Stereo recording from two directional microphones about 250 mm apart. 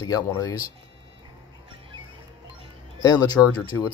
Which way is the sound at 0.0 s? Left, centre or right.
Centre.